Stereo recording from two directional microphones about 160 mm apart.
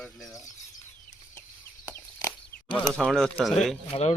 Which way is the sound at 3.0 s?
5° left (ahead or behind).